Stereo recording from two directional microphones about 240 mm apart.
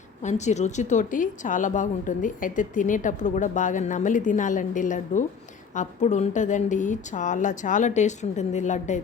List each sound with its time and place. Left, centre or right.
0.2 s a woman's voice: left